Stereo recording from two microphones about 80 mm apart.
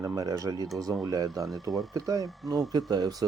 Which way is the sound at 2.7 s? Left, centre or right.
Right.